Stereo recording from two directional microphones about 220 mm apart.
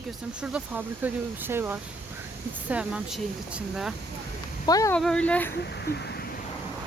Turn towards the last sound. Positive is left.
turn(degrees=45)  # may be behind; listen again after turning